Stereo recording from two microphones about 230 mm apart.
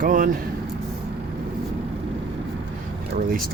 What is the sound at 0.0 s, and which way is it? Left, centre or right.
Speech, right.